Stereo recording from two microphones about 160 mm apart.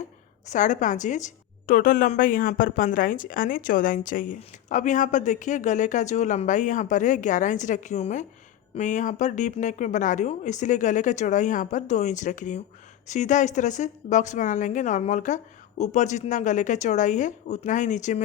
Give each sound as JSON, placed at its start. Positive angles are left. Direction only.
{"t": 0.5, "sound": "a woman's voice", "side_deg": 50}